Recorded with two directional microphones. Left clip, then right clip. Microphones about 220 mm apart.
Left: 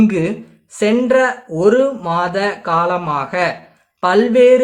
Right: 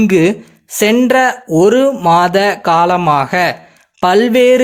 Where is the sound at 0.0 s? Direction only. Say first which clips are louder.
Right 6 dB; 40° right (ahead or behind).